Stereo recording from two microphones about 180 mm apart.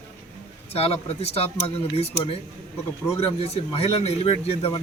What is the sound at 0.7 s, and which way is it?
Speech, 35° left (ahead or behind).